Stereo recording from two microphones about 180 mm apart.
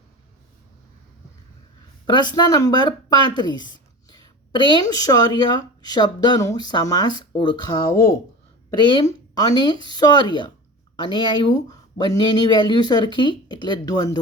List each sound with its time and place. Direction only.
2.0 s speech: 25° left (ahead or behind)